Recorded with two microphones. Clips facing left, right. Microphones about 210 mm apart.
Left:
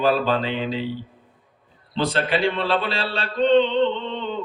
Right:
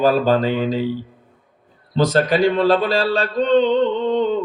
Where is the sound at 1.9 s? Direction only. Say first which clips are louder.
Right 6 dB; 40° right (ahead or behind).